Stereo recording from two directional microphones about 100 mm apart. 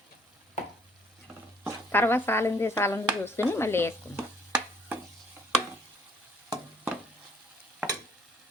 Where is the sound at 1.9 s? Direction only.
20° left (ahead or behind).